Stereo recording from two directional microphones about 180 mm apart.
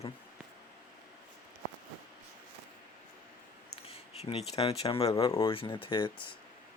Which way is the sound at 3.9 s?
35° left (ahead or behind).